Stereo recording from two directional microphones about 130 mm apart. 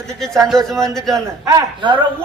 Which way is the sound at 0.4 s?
Centre (ahead or behind).